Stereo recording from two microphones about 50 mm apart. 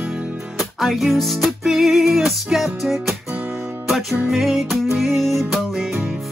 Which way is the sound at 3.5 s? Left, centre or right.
Right.